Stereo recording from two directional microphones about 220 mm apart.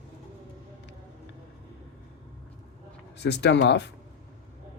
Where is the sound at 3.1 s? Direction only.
50° left (ahead or behind).